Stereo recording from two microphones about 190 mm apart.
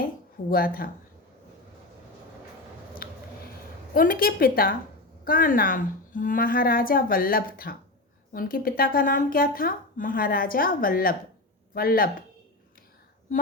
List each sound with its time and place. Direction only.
0.5 s speech: 50° left (ahead or behind)
3.0 s a sound: 50° left (ahead or behind)
3.9 s speech: 50° left (ahead or behind)